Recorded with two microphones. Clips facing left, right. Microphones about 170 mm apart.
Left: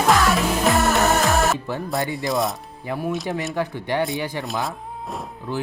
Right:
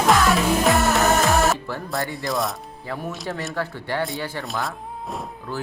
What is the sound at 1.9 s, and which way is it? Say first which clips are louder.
Speech: left 2 dB; 20° left (ahead or behind).